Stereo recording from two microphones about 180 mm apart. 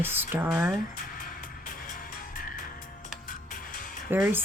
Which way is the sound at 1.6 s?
50° left (ahead or behind).